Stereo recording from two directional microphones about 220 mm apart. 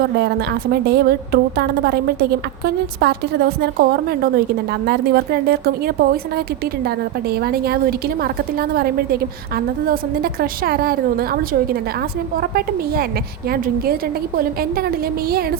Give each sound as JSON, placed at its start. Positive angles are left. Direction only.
{"t": 0.0, "sound": "a woman's voice", "side_deg": -45}